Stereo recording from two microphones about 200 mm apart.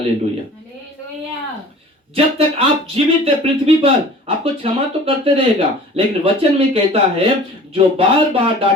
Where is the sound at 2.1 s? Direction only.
30° right (ahead or behind).